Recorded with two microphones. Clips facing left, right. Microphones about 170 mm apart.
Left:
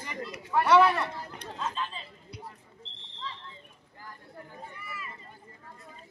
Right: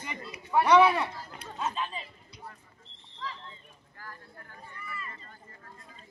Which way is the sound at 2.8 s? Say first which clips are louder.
Right 1 dB; 25° left (ahead or behind).